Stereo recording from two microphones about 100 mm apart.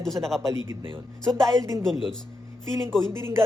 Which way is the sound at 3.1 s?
25° right (ahead or behind).